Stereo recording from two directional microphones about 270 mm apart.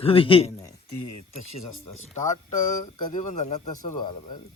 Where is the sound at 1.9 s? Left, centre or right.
Left.